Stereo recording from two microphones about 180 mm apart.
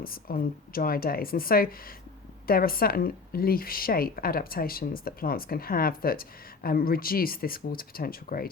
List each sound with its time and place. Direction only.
0.0 s a woman's voice: 55° left (ahead or behind)